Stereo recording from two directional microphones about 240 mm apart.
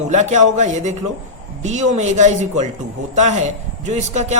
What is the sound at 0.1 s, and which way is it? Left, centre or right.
A woman's voice, right.